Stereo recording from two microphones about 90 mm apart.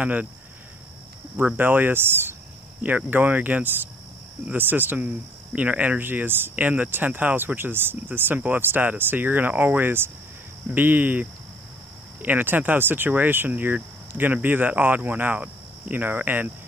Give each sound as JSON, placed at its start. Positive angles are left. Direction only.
{"t": 0.0, "sound": "speech", "side_deg": -15}
{"t": 1.3, "sound": "speech", "side_deg": -20}